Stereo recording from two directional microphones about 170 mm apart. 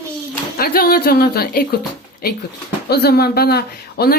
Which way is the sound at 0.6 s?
65° left (ahead or behind).